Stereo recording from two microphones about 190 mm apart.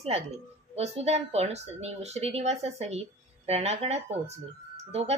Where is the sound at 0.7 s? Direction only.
35° right (ahead or behind).